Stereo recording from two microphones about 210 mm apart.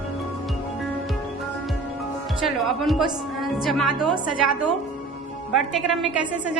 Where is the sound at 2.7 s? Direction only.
Centre (ahead or behind).